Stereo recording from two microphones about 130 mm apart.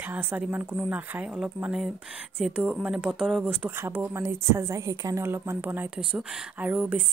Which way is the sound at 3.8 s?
20° right (ahead or behind).